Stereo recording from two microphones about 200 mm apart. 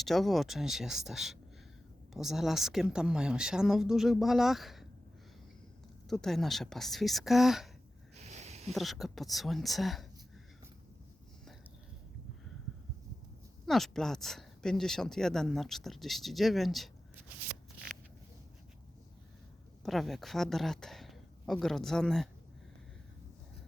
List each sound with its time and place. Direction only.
0.0 s speech: centre (ahead or behind)
6.1 s speech: centre (ahead or behind)
8.1 s a sound: 35° right (ahead or behind)
8.7 s speech: centre (ahead or behind)
13.7 s speech: centre (ahead or behind)
19.8 s speech: centre (ahead or behind)